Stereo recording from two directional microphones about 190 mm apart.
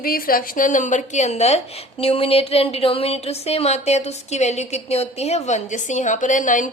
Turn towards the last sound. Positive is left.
turn(degrees=45)  # may be behind; listen again after turning